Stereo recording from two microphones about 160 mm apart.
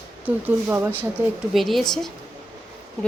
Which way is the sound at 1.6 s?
Centre (ahead or behind).